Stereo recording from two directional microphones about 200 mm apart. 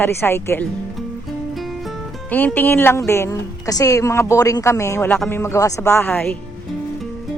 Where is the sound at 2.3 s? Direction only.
10° left (ahead or behind).